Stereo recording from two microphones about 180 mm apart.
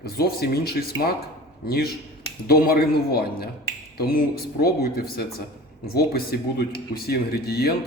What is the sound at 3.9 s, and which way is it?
Finger snapping, 55° left (ahead or behind).